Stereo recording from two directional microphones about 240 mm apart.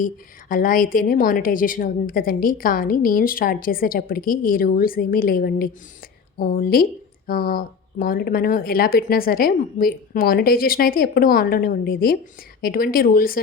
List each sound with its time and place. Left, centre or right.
0.0 s a woman's voice: left